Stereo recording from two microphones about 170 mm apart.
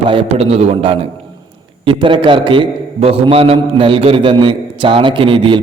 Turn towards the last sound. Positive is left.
turn(degrees=-30)  # may be behind; listen again after turning